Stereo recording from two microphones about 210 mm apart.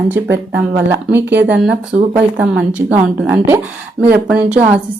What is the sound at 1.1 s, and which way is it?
Speech, 10° right (ahead or behind).